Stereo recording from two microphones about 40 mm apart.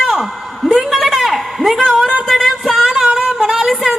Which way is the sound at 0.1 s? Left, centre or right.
Centre.